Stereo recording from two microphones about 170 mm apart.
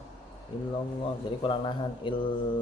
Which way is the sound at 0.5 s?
30° left (ahead or behind).